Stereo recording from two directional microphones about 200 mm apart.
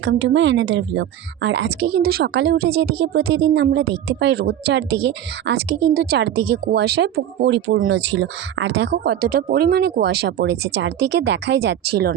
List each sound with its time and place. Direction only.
0.0 s a woman's voice: 65° right (ahead or behind)